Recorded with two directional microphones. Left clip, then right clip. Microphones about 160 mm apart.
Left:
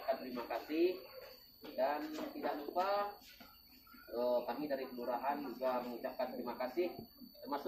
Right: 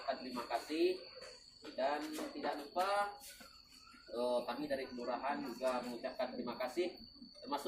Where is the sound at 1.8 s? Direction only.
10° right (ahead or behind).